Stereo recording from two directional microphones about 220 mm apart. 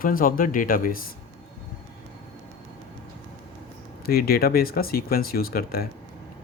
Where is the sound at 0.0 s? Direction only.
40° left (ahead or behind).